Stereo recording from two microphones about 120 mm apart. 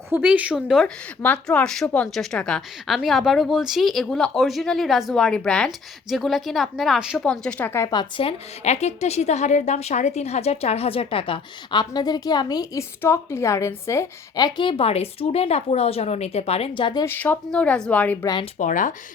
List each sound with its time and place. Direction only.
0.1 s speech: 10° right (ahead or behind)
1.2 s speech: 10° left (ahead or behind); by 7.3 s 5° right (ahead or behind)
7.3 s a woman's voice: 5° left (ahead or behind)
7.9 s speech: 35° left (ahead or behind)
8.2 s a woman's voice: 60° left (ahead or behind); by 12.8 s 35° left (ahead or behind)
13.0 s a woman's voice: 20° left (ahead or behind); by 17.0 s 45° left (ahead or behind)
17.1 s a woman's voice: 20° left (ahead or behind)
18.6 s speech: 90° left